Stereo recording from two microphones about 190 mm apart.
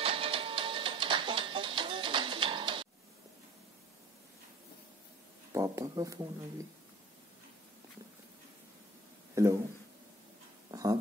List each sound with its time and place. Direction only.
0.0 s printer: 30° right (ahead or behind)
5.5 s speech: 15° right (ahead or behind)
9.3 s a sound: 15° right (ahead or behind)
10.7 s dog: 20° right (ahead or behind)